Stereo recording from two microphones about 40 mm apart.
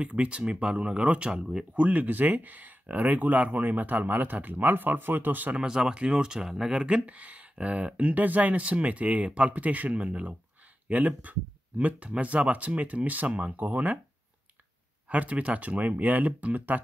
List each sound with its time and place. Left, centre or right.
0.0 s speech: right
1.8 s speech: right
5.6 s speech: centre
6.7 s speech: right
11.3 s speech: right
12.1 s speech: right
15.0 s speech: right